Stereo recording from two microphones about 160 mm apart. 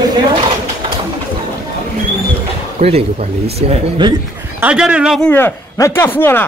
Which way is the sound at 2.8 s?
40° right (ahead or behind).